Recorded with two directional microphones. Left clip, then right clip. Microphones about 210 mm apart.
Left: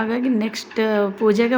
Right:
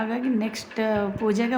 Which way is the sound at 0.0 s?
15° left (ahead or behind).